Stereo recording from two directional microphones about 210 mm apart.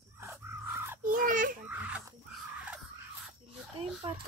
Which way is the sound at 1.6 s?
10° right (ahead or behind).